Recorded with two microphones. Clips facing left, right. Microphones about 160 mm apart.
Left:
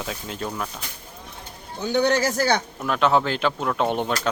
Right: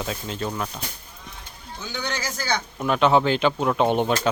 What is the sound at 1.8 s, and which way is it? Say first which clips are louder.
Speech: left 10 dB; 60° left (ahead or behind).